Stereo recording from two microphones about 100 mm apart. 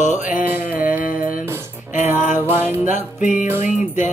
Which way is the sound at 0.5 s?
20° right (ahead or behind).